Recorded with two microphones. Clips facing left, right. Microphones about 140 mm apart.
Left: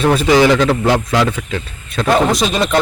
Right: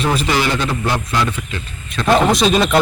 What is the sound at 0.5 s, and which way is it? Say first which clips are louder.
Speech: left 7 dB; 90° left.